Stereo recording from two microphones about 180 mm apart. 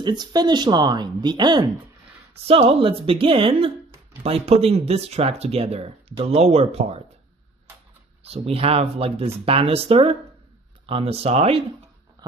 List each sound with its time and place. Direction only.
0.0 s speech: 25° right (ahead or behind)
8.2 s speech: 35° right (ahead or behind)
12.2 s a sound: 20° right (ahead or behind)